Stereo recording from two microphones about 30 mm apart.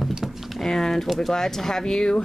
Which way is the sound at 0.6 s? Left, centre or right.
Centre.